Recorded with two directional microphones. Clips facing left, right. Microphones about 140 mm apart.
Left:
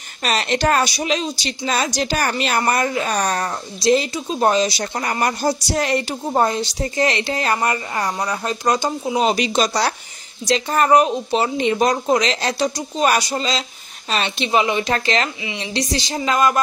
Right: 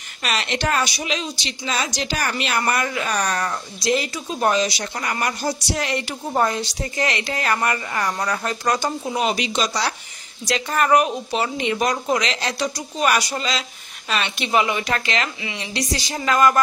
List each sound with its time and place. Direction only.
0.2 s a woman's voice: 40° left (ahead or behind)
6.3 s a woman's voice: 30° left (ahead or behind)
9.2 s speech: 40° left (ahead or behind)
10.4 s a woman's voice: 30° left (ahead or behind)